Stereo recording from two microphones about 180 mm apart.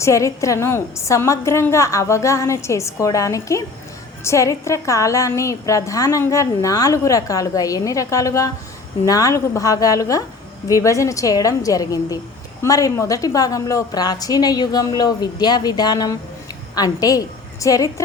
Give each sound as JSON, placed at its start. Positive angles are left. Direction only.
{"t": 0.0, "sound": "a woman's voice", "side_deg": 15}